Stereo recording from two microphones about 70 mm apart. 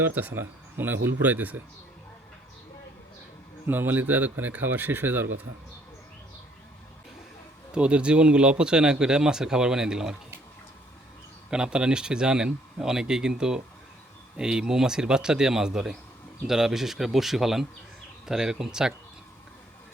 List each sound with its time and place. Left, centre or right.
0.0 s speech: right
3.7 s speech: right
7.7 s speech: centre
11.5 s speech: centre